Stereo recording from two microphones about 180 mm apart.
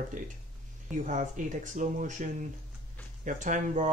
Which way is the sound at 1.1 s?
45° right (ahead or behind).